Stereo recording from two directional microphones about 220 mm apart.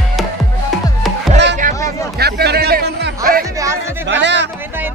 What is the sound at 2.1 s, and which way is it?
Music, 45° right (ahead or behind).